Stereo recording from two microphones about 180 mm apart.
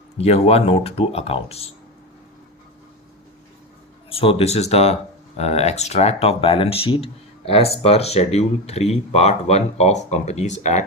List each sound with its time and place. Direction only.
0.2 s speech: 35° left (ahead or behind)
4.1 s speech: 30° left (ahead or behind)